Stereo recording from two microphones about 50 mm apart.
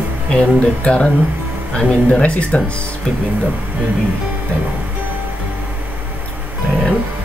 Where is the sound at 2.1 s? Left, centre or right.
Left.